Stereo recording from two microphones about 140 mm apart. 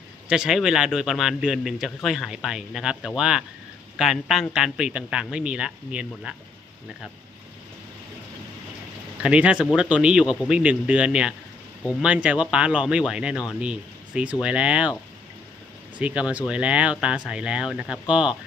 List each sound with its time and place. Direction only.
0.3 s a man's voice: 5° right (ahead or behind)
9.2 s speech: 5° right (ahead or behind)
16.0 s speech: 10° right (ahead or behind)